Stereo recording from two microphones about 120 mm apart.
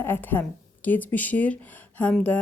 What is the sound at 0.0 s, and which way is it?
A woman's voice, 20° left (ahead or behind).